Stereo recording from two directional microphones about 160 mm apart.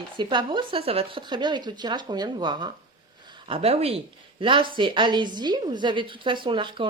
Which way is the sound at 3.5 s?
40° right (ahead or behind).